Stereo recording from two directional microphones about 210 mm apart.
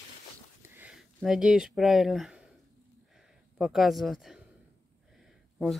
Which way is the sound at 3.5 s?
Centre (ahead or behind).